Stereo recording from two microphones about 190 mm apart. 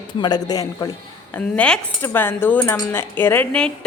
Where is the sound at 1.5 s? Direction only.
5° left (ahead or behind).